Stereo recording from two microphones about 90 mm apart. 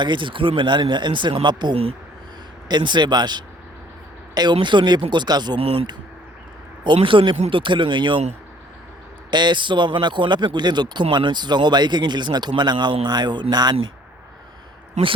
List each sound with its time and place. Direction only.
0.0 s speech: 65° right (ahead or behind)
1.7 s speech: 90° right
2.6 s speech: 55° right (ahead or behind)
4.5 s speech: 60° right (ahead or behind)
5.5 s speech: 90° right
6.8 s speech: 65° right (ahead or behind)
9.3 s speech: 55° right (ahead or behind)